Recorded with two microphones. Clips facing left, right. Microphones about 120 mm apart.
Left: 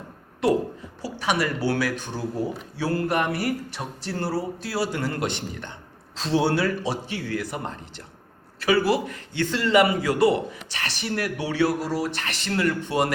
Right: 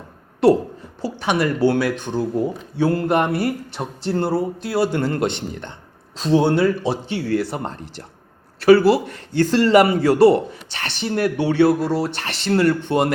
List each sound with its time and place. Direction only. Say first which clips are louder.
1.0 s a woman's voice: right 5 dB; 25° right (ahead or behind)
8.9 s a man's voice: right 6 dB; 40° right (ahead or behind)